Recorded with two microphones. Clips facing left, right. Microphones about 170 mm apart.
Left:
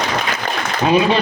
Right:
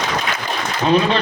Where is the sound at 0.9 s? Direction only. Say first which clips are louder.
Left 1 dB; 10° left (ahead or behind).